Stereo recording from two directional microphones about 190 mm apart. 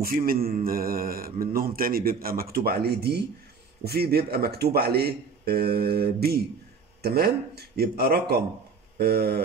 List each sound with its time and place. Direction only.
0.0 s speech: 50° right (ahead or behind)